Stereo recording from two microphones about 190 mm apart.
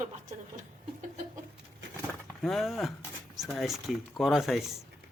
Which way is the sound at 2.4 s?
Centre (ahead or behind).